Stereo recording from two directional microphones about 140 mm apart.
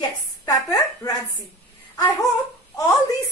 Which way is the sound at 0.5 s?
25° left (ahead or behind).